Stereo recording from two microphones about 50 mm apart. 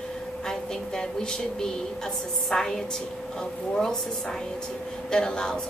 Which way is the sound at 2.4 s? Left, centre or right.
Centre.